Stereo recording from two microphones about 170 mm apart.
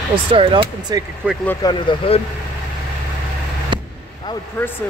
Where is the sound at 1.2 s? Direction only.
5° right (ahead or behind).